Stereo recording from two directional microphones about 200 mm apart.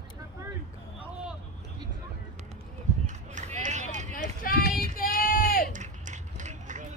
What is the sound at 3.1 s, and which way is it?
Run, 35° right (ahead or behind).